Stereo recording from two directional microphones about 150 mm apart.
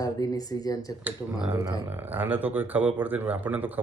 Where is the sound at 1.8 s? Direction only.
15° right (ahead or behind).